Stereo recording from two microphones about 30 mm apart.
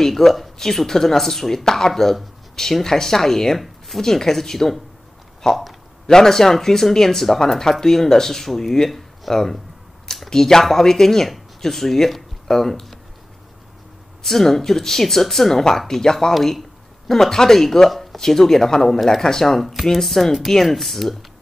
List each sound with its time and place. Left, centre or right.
0.0 s speech: centre
11.2 s speech: centre
14.2 s speech: centre
16.3 s speech: centre